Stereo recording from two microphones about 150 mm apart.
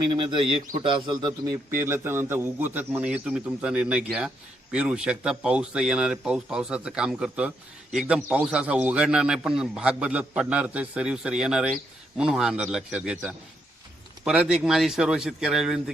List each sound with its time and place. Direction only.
0.1 s a man's voice: 35° right (ahead or behind); by 15.8 s 5° right (ahead or behind)